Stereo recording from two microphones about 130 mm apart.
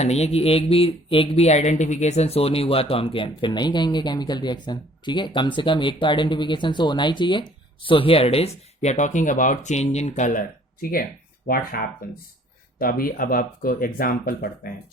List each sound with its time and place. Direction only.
0.0 s speech: 55° left (ahead or behind); by 14.7 s 90° left